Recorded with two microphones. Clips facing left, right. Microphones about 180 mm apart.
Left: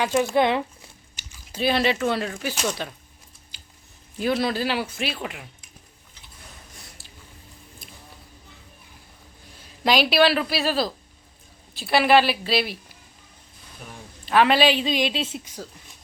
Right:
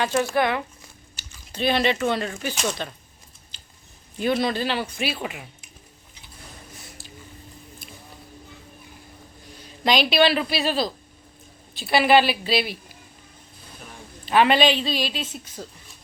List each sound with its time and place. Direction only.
0.0 s a sound: 15° left (ahead or behind)
1.3 s speech: 5° left (ahead or behind)
3.5 s biting: 10° left (ahead or behind)
4.2 s speech: centre (ahead or behind)
6.7 s a sound: centre (ahead or behind)
9.8 s speech: 5° left (ahead or behind)
14.3 s a woman's voice: centre (ahead or behind); by 15.4 s 25° left (ahead or behind)
15.6 s speech: centre (ahead or behind)